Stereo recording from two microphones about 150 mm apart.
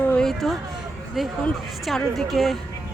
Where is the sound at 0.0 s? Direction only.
5° left (ahead or behind).